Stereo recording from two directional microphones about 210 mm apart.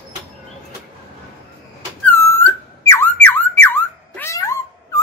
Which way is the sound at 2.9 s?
10° left (ahead or behind).